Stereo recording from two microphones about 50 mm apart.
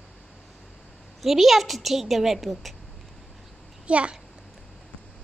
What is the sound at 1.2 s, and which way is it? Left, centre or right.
A woman's voice, centre.